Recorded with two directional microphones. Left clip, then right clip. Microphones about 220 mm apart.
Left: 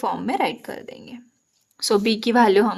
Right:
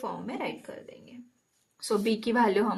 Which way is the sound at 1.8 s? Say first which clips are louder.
Left 8 dB; 40° left (ahead or behind).